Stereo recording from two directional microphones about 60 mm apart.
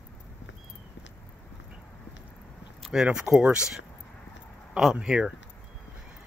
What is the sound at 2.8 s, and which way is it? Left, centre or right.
Speech, centre.